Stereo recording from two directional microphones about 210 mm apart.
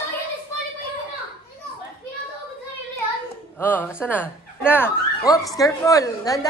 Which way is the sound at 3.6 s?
10° left (ahead or behind).